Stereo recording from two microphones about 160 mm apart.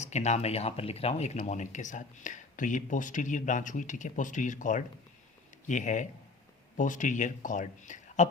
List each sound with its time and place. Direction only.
0.0 s speech: 45° left (ahead or behind)